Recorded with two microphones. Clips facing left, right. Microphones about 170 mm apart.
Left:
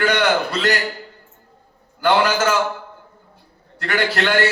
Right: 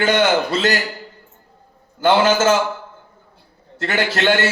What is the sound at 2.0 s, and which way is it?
Speech, 20° right (ahead or behind).